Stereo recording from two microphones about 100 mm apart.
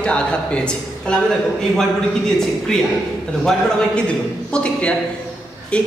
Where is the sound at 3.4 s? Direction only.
10° left (ahead or behind).